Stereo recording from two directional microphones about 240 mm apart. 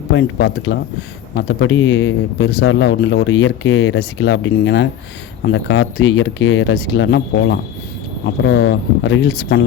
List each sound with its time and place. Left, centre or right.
0.1 s speech: left